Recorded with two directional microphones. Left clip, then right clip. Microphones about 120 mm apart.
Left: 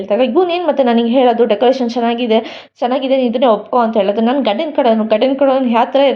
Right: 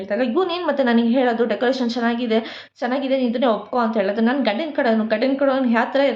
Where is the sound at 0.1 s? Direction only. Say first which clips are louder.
Left 8 dB; 35° left (ahead or behind).